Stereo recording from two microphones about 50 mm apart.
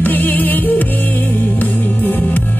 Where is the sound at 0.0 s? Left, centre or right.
Left.